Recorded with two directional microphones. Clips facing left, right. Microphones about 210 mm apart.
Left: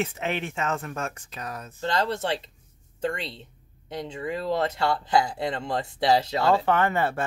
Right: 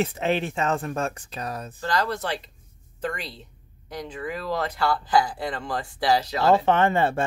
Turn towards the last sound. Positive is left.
turn(degrees=-25)  # may be behind; listen again after turning